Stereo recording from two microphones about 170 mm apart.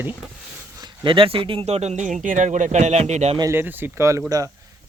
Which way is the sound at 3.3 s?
15° right (ahead or behind).